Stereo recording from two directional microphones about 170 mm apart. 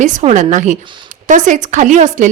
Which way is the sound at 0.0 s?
45° right (ahead or behind).